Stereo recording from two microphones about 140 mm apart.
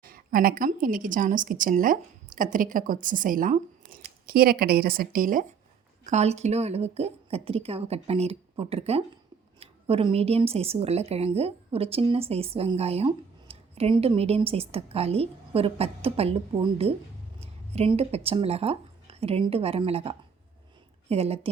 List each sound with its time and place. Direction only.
0.0 s a woman's voice: 90° right
6.1 s a woman's voice: 55° right (ahead or behind)